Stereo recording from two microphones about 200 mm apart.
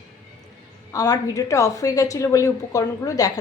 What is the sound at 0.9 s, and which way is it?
A woman's voice, 15° left (ahead or behind).